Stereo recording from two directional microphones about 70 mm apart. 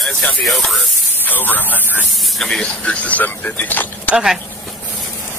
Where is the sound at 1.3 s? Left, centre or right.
Left.